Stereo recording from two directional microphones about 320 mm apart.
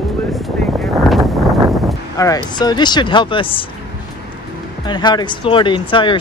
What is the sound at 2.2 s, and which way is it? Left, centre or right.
Speech, centre.